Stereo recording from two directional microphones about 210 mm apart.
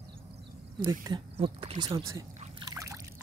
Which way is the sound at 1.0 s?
25° right (ahead or behind).